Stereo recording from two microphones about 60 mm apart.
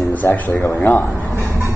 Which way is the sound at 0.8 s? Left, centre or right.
Left.